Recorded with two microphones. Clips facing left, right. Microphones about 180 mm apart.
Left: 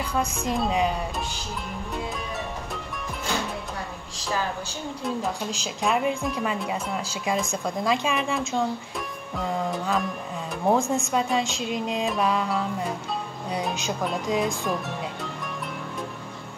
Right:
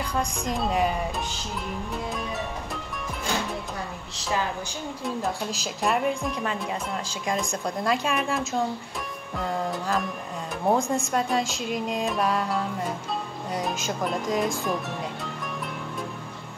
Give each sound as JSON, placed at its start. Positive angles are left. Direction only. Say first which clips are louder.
{"t": 0.1, "sound": "speech", "louder": "left 3 dB", "side_deg": 5}
{"t": 5.8, "sound": "speech", "louder": "even", "side_deg": 0}